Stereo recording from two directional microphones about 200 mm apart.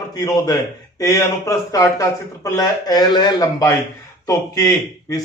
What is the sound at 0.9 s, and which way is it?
A man's voice, 15° left (ahead or behind).